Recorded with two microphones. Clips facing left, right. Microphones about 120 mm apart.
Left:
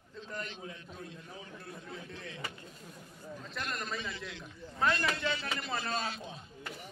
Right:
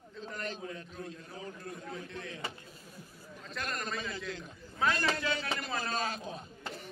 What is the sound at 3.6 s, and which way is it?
Speech, centre (ahead or behind).